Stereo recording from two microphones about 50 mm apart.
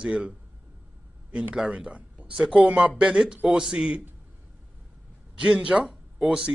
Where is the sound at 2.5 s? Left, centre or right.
Right.